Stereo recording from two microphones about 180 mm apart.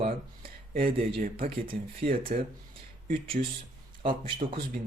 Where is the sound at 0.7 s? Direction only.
55° right (ahead or behind).